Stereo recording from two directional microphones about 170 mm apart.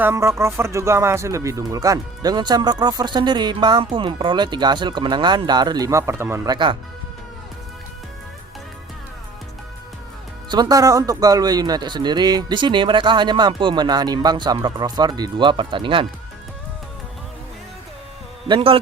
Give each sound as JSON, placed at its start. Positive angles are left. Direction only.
{"t": 0.0, "sound": "speech", "side_deg": -15}
{"t": 10.5, "sound": "speech", "side_deg": -20}
{"t": 18.4, "sound": "speech", "side_deg": -30}